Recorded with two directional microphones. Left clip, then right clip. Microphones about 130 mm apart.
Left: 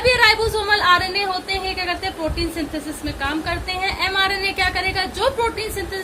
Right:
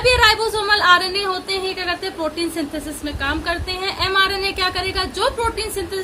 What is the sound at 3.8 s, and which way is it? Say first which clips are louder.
Speech: right 2 dB; 90° right.